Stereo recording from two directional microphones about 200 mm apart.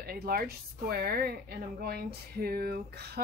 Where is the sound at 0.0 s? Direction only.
50° right (ahead or behind).